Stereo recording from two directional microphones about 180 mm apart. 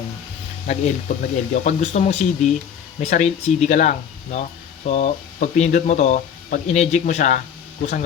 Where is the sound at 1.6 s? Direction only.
40° left (ahead or behind).